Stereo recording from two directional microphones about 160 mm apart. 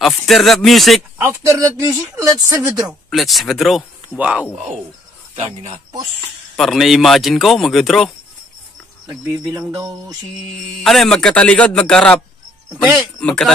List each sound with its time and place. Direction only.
0.0 s speech: centre (ahead or behind)
1.1 s speech: 15° right (ahead or behind)
2.9 s speech: centre (ahead or behind)
5.3 s speech: 45° right (ahead or behind)
6.5 s speech: centre (ahead or behind)
10.8 s speech: centre (ahead or behind)
12.8 s speech: 10° right (ahead or behind)
13.2 s speech: 5° left (ahead or behind)